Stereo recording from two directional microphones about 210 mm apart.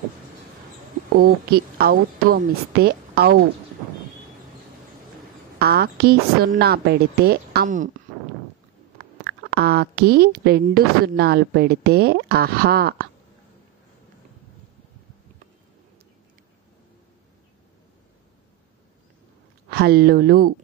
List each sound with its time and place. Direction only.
1.2 s a woman's voice: 45° right (ahead or behind)
5.6 s a woman's voice: 50° right (ahead or behind)
9.2 s a woman's voice: 50° right (ahead or behind)
19.7 s a woman's voice: 50° right (ahead or behind)